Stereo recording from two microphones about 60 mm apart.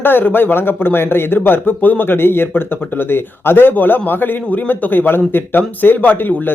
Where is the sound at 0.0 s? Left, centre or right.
Left.